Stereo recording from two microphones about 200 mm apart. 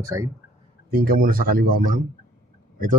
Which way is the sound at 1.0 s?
45° right (ahead or behind).